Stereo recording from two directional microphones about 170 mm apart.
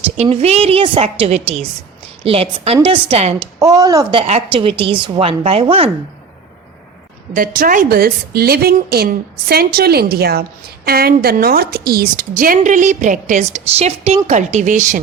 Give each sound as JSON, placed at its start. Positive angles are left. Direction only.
{"t": 0.2, "sound": "a woman's voice", "side_deg": -40}
{"t": 3.6, "sound": "speech", "side_deg": -20}
{"t": 4.1, "sound": "a woman's voice", "side_deg": -35}
{"t": 7.3, "sound": "a woman's voice", "side_deg": -55}